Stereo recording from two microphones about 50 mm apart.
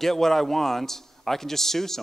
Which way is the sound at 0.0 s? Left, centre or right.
Centre.